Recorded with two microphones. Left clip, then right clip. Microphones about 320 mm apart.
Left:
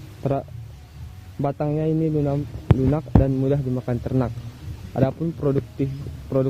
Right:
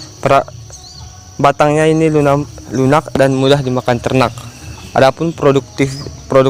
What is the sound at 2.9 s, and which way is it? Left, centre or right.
Speech, centre.